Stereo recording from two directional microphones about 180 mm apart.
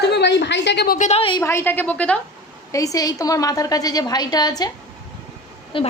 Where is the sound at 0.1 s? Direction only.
70° left (ahead or behind).